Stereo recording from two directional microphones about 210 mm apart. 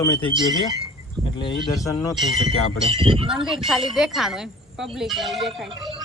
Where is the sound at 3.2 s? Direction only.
Centre (ahead or behind).